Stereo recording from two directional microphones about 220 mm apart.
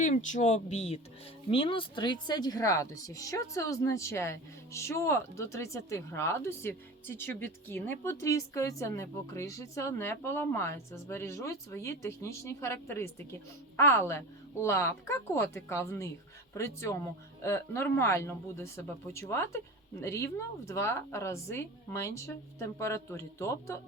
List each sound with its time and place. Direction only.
0.0 s speech: 35° left (ahead or behind); by 23.7 s 15° left (ahead or behind)